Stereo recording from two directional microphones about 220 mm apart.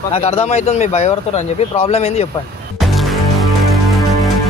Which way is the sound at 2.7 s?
Centre (ahead or behind).